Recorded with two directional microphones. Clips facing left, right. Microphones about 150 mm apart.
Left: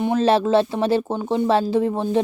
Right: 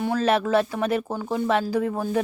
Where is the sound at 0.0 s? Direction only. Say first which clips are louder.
Left 4 dB; 25° left (ahead or behind).